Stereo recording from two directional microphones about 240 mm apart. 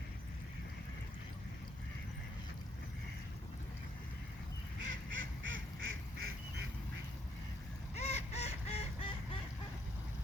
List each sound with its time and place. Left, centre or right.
4.8 s duck: right
7.9 s duck: left